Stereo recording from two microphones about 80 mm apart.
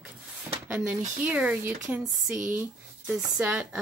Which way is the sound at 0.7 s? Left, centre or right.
Centre.